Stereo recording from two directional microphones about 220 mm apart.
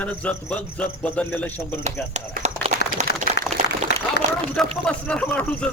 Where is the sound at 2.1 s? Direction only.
30° right (ahead or behind).